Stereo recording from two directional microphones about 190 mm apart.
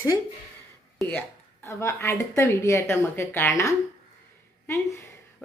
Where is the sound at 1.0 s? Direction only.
5° left (ahead or behind).